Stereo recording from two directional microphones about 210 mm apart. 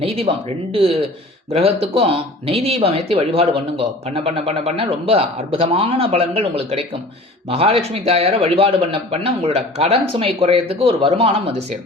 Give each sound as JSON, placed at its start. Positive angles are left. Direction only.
{"t": 0.0, "sound": "speech", "side_deg": -25}